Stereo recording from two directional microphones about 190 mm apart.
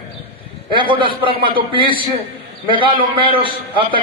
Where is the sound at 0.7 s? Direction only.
25° right (ahead or behind).